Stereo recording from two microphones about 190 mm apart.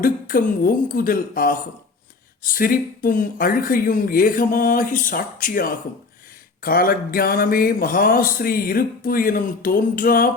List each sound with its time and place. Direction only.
0.0 s speech: 50° left (ahead or behind)